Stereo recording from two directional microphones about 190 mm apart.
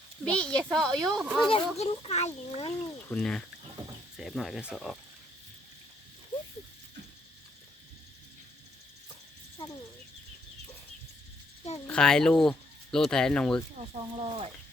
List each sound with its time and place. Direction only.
0.3 s speech: 5° left (ahead or behind)
1.4 s a child's voice: 25° left (ahead or behind)
3.1 s speech: 5° left (ahead or behind)
11.9 s speech: 5° left (ahead or behind)
14.0 s speech: 25° right (ahead or behind)